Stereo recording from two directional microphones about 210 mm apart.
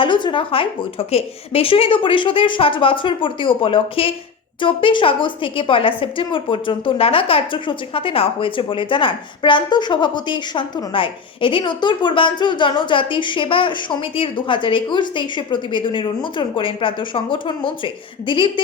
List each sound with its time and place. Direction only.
0.0 s a woman's voice: 20° left (ahead or behind)